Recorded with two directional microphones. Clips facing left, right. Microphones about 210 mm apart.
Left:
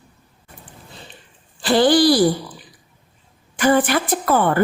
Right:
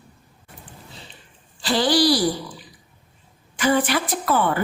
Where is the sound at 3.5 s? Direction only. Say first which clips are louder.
Left 4 dB; 50° left (ahead or behind).